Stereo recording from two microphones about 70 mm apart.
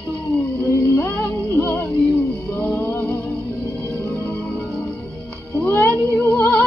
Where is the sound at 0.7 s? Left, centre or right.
Left.